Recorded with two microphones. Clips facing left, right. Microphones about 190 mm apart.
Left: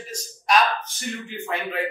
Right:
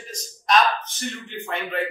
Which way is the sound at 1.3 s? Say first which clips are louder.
Left 1 dB; 5° left (ahead or behind).